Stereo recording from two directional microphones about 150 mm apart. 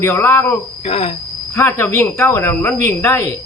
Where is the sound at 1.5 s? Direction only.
15° left (ahead or behind).